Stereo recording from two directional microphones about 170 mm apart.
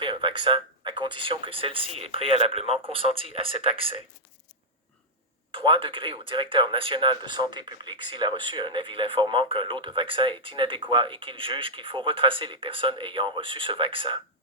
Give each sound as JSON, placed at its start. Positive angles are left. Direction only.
{"t": 0.0, "sound": "speech", "side_deg": -30}
{"t": 5.5, "sound": "speech", "side_deg": -30}